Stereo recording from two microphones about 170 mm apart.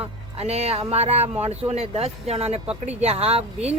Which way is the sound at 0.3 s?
40° right (ahead or behind).